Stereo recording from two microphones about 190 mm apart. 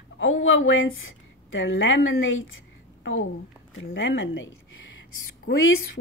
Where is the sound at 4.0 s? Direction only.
75° left (ahead or behind).